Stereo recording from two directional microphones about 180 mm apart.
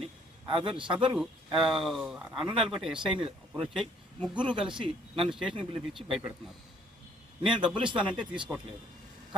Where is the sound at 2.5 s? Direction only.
30° right (ahead or behind).